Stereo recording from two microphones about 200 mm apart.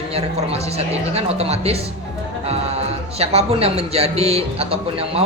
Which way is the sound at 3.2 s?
30° right (ahead or behind).